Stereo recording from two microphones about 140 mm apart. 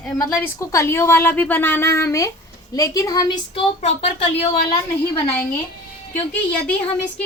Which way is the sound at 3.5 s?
40° left (ahead or behind).